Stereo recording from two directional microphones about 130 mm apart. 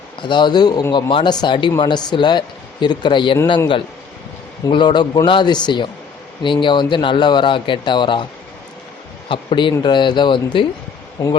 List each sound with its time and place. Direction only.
0.2 s speech: 35° left (ahead or behind)
4.7 s speech: 35° left (ahead or behind)
9.3 s speech: 40° left (ahead or behind)